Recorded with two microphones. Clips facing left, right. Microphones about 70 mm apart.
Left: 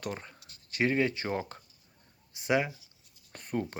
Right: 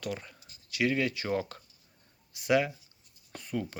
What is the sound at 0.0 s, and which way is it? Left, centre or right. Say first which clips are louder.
Speech: right 1 dB; left.